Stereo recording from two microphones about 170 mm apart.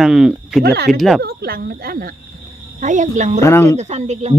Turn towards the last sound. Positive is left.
turn(degrees=-40)  # may be behind; listen again after turning